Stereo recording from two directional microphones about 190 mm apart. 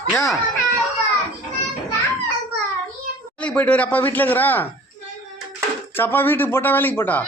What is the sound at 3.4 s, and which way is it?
Speech, 5° left (ahead or behind).